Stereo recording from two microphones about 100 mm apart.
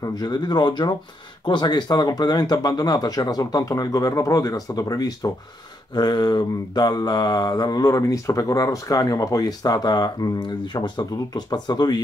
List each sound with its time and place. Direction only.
0.0 s speech: 40° left (ahead or behind)
1.4 s mantra: 50° left (ahead or behind)